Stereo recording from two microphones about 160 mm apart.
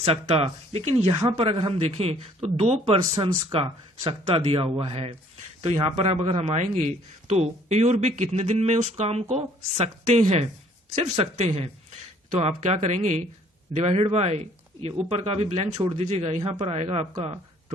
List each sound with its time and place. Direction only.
0.0 s a man's voice: 40° right (ahead or behind)